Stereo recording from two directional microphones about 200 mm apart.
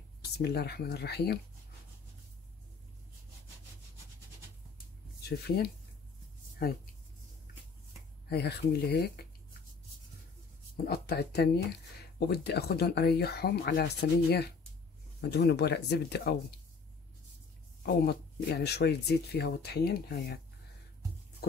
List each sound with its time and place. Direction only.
0.4 s speech: 55° left (ahead or behind)
5.2 s speech: 50° left (ahead or behind)
8.3 s speech: 55° left (ahead or behind)
10.9 s speech: 55° left (ahead or behind)
17.8 s speech: 55° left (ahead or behind)